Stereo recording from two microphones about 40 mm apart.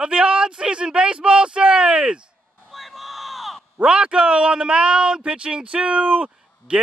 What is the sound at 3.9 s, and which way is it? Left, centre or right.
A man's voice, right.